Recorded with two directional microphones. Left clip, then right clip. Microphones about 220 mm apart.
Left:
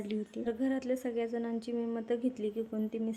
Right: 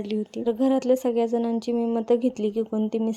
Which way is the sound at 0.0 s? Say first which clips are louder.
Right 10 dB; 30° right (ahead or behind).